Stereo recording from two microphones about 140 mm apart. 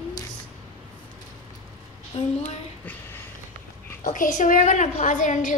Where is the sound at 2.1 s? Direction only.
50° left (ahead or behind).